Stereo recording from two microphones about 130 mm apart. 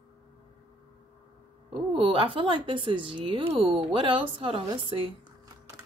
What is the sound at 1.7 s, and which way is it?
Speech, 45° right (ahead or behind).